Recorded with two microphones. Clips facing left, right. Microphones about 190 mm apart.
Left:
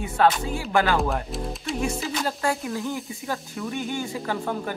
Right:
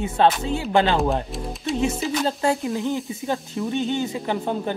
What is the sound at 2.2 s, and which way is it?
Speech, 25° right (ahead or behind).